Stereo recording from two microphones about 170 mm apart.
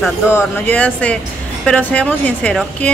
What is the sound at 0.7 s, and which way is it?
Speech, 10° left (ahead or behind).